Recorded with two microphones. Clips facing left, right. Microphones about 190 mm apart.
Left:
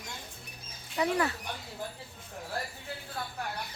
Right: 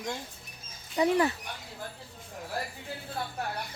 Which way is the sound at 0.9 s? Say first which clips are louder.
Right 4 dB; 20° right (ahead or behind).